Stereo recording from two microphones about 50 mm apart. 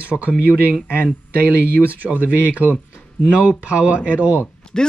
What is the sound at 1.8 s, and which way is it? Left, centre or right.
Speech, left.